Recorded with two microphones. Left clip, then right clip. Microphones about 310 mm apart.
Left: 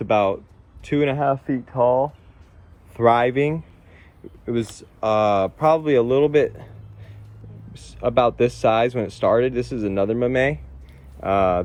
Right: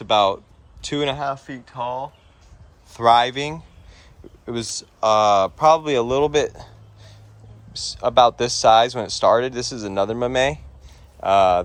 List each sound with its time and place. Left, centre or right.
0.0 s speech: centre
7.9 s speech: centre
9.5 s speech: right
9.8 s speech: centre